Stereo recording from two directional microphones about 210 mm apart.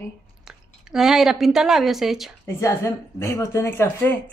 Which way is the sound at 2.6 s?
15° left (ahead or behind).